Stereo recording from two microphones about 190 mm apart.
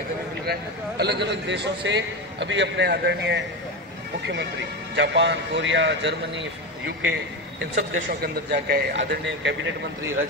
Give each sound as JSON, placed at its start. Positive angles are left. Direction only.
{"t": 0.5, "sound": "a man's voice", "side_deg": -60}
{"t": 4.9, "sound": "a man's voice", "side_deg": -70}
{"t": 7.7, "sound": "a man's voice", "side_deg": -55}